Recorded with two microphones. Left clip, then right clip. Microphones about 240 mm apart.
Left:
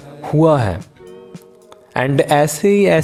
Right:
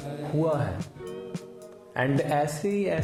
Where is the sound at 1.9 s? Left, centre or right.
Left.